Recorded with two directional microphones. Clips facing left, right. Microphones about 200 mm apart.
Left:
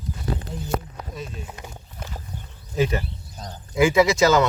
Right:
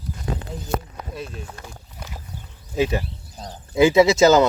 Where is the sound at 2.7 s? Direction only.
10° right (ahead or behind).